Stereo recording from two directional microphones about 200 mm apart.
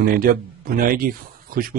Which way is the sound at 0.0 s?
45° right (ahead or behind).